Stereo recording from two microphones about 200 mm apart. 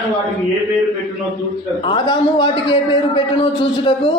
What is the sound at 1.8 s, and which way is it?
Speech, 25° left (ahead or behind).